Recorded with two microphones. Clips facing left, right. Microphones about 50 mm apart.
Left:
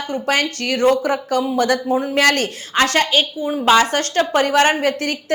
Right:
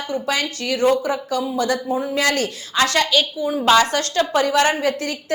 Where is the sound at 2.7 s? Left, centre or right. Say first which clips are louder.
Left 2 dB; left.